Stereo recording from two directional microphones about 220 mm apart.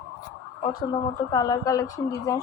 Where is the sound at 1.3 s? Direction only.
20° left (ahead or behind).